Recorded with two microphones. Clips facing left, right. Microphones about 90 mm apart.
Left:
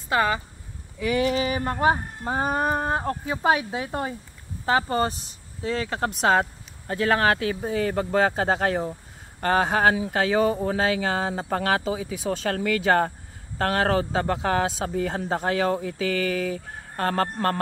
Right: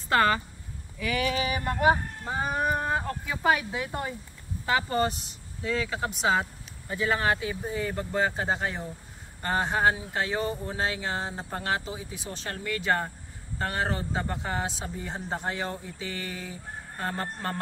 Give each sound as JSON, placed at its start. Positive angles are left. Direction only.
{"t": 0.1, "sound": "speech", "side_deg": 15}
{"t": 0.9, "sound": "speech", "side_deg": 25}
{"t": 2.3, "sound": "speech", "side_deg": 45}
{"t": 6.9, "sound": "a man's voice", "side_deg": 65}